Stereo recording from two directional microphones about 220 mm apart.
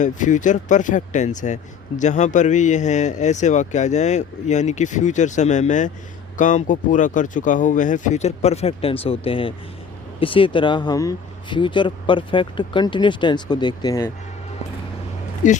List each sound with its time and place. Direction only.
0.0 s speech: 35° left (ahead or behind); by 14.1 s 15° left (ahead or behind)
15.4 s speech: 35° left (ahead or behind)